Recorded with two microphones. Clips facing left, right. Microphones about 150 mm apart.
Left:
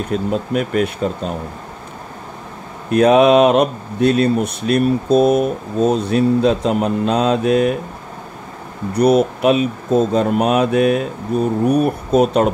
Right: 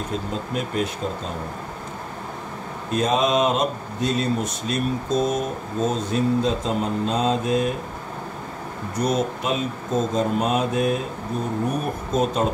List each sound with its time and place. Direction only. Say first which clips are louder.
0.1 s speech: left 10 dB; 65° left (ahead or behind)
2.9 s speech: left 10 dB; 65° left (ahead or behind)
8.9 s speech: left 10 dB; 65° left (ahead or behind)